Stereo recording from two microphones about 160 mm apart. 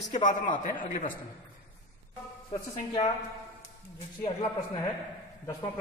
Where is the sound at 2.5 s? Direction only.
30° left (ahead or behind).